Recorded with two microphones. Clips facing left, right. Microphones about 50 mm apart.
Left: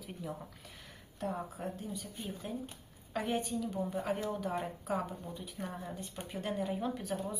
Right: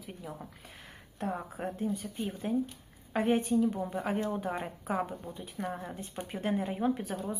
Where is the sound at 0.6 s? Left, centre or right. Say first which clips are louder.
Right 2 dB; right.